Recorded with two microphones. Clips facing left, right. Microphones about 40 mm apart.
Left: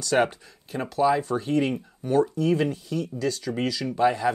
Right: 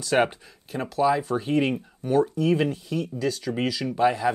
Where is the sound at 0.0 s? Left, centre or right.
Centre.